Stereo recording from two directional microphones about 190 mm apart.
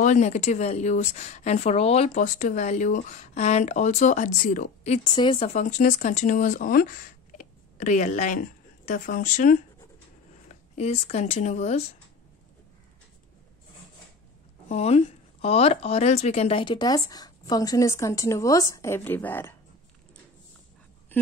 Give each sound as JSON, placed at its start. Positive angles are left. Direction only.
{"t": 0.0, "sound": "speech", "side_deg": 40}
{"t": 5.0, "sound": "speech", "side_deg": 25}
{"t": 14.7, "sound": "speech", "side_deg": 35}